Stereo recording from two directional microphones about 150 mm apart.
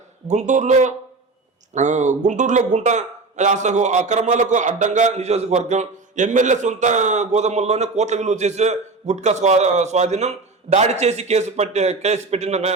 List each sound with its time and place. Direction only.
0.3 s speech: 50° right (ahead or behind)